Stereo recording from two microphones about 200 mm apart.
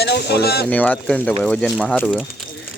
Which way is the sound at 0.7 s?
5° left (ahead or behind).